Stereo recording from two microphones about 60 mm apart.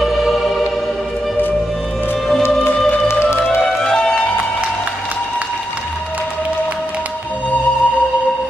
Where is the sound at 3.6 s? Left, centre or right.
Centre.